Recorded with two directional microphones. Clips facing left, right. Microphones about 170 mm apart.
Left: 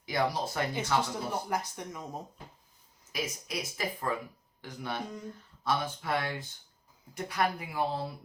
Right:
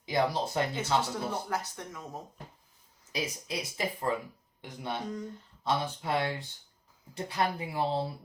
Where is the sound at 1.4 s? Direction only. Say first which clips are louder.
Left 1 dB; 15° left (ahead or behind).